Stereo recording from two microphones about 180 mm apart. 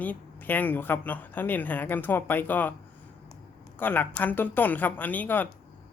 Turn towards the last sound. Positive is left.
turn(degrees=10)  # may be behind; listen again after turning